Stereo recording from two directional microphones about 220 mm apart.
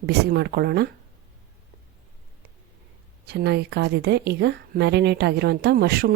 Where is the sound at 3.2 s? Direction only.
45° right (ahead or behind).